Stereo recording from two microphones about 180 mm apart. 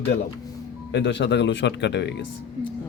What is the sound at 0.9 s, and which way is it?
Speech, 75° left (ahead or behind).